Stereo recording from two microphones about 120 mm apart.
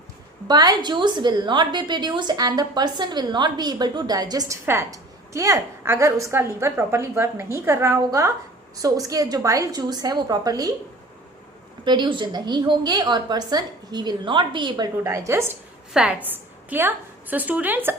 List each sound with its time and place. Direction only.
0.4 s a woman's voice: 35° right (ahead or behind)
4.6 s a woman's voice: 20° right (ahead or behind)
11.9 s a woman's voice: 40° right (ahead or behind)
15.0 s a woman's voice: 25° right (ahead or behind)
15.9 s a woman's voice: 10° right (ahead or behind)